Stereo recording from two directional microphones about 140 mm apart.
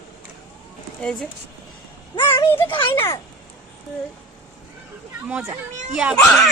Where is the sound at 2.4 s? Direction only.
15° left (ahead or behind).